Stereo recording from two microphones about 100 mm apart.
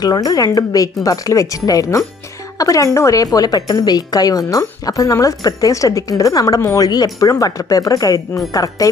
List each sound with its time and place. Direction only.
0.0 s speech: 40° left (ahead or behind)